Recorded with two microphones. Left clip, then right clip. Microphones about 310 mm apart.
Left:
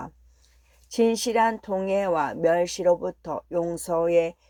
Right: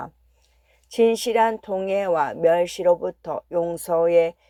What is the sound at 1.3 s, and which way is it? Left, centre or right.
Speech, right.